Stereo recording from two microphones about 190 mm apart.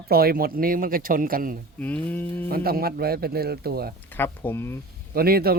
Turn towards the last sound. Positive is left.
turn(degrees=-55)  # may be behind; listen again after turning